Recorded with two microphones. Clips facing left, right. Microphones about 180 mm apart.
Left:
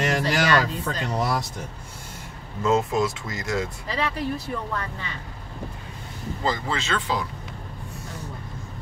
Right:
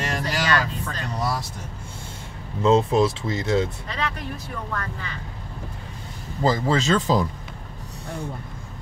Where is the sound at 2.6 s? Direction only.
30° right (ahead or behind).